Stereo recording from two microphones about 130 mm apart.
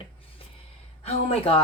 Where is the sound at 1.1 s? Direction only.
50° left (ahead or behind).